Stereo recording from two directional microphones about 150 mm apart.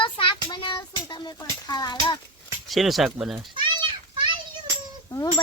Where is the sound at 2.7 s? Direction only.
Centre (ahead or behind).